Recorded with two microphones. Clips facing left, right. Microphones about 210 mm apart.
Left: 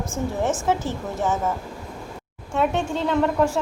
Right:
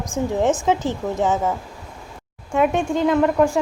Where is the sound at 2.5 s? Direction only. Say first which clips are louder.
Right 4 dB; 10° right (ahead or behind).